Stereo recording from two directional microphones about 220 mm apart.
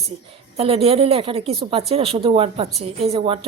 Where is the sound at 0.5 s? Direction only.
25° right (ahead or behind).